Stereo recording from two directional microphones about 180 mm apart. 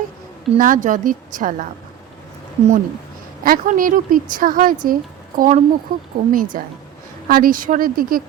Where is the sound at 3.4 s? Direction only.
50° right (ahead or behind).